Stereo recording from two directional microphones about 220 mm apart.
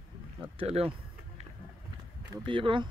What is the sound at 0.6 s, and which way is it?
Speech, 25° right (ahead or behind).